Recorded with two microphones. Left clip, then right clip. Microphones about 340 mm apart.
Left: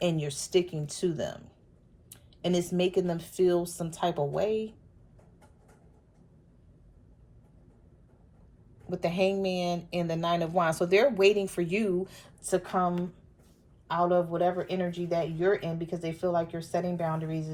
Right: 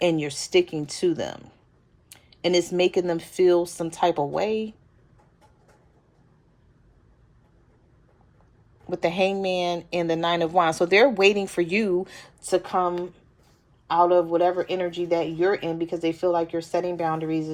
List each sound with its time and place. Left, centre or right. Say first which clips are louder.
0.2 s speech: right 6 dB; right
0.7 s speech: right 8 dB; right
1.0 s speech: right 6 dB; right
2.6 s speech: right 6 dB; right
8.9 s speech: right 5 dB; right